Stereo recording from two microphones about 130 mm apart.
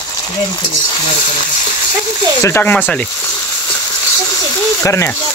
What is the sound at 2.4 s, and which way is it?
Speech, 15° left (ahead or behind).